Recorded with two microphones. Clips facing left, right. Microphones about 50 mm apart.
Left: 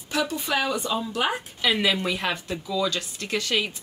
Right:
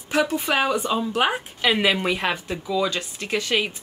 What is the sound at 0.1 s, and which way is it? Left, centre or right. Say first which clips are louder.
Speech: right 4 dB; right.